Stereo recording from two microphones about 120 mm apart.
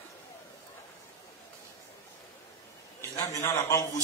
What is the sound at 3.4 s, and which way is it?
Speech, 25° left (ahead or behind).